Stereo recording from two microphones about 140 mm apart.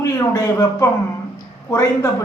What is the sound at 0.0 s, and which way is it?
Speech, 25° left (ahead or behind).